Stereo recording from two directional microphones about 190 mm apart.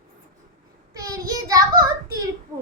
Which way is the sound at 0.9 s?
20° right (ahead or behind).